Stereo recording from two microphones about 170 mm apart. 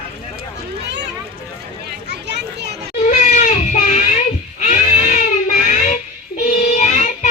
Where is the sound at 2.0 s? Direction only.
90° right.